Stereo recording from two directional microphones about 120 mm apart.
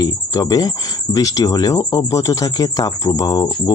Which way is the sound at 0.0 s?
30° left (ahead or behind).